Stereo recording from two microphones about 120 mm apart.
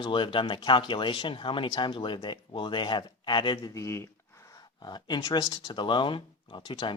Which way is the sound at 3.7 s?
25° left (ahead or behind).